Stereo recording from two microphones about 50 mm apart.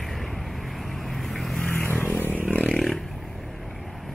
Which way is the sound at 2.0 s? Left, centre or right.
Left.